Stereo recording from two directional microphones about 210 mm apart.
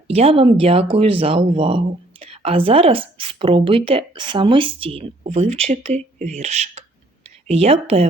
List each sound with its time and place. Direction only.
0.1 s speech: 25° right (ahead or behind)